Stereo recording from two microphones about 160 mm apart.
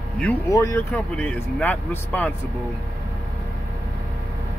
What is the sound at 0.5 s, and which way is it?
Speech, 20° left (ahead or behind).